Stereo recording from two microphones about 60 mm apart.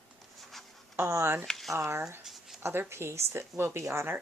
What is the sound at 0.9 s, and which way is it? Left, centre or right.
Speech, right.